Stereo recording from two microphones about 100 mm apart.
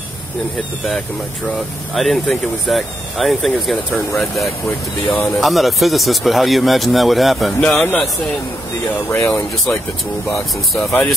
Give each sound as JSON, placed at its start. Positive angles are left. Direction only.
{"t": 2.0, "sound": "speech", "side_deg": 0}
{"t": 5.0, "sound": "speech", "side_deg": 15}
{"t": 5.4, "sound": "speech", "side_deg": 0}
{"t": 9.1, "sound": "speech", "side_deg": 25}
{"t": 10.3, "sound": "speech", "side_deg": 0}